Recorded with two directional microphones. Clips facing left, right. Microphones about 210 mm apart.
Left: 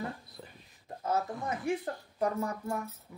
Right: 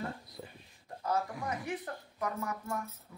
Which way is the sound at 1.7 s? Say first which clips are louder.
Left 6 dB; 30° left (ahead or behind).